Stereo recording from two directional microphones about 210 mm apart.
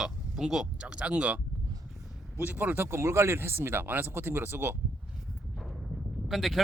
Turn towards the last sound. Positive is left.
turn(degrees=0)  # may be behind; listen again after turning